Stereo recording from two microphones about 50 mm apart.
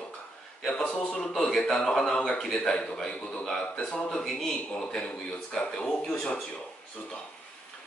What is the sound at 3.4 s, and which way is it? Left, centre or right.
Speech, centre.